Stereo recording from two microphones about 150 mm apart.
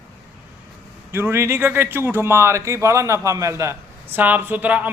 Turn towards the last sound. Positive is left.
turn(degrees=-10)  # may be behind; listen again after turning